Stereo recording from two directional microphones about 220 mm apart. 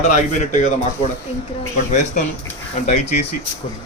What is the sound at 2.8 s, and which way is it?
Speech, 30° left (ahead or behind).